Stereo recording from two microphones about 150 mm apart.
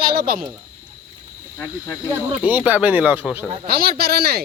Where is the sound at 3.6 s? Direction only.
80° right.